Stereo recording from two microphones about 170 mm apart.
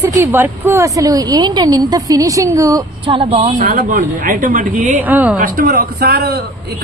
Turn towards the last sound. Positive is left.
turn(degrees=-65)  # may be behind; listen again after turning